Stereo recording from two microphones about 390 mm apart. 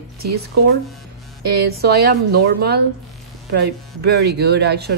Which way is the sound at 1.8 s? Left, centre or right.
Right.